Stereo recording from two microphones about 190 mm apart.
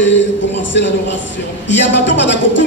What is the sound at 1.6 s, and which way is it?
A man's voice, 70° left (ahead or behind).